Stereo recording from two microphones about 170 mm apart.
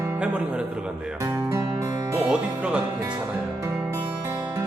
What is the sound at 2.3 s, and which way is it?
Music, 5° right (ahead or behind).